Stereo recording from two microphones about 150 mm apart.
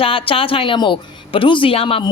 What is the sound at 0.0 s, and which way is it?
Speech, 35° left (ahead or behind).